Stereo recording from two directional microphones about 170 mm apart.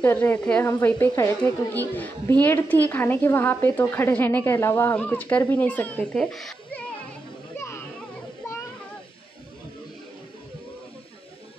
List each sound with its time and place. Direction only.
0.0 s a woman's voice: 10° left (ahead or behind)
7.5 s children playing: 15° left (ahead or behind)